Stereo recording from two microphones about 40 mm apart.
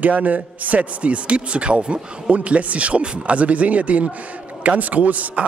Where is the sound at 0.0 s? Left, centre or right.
Right.